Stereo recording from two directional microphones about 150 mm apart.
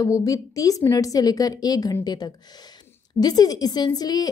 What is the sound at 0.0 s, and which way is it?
A woman's voice, 20° left (ahead or behind).